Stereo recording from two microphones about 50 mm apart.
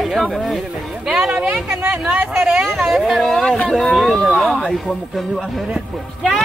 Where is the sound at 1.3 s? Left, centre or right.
Right.